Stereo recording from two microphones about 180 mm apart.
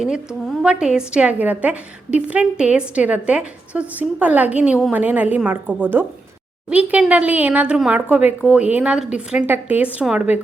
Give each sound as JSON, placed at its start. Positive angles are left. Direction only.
{"t": 0.0, "sound": "a woman's voice", "side_deg": -5}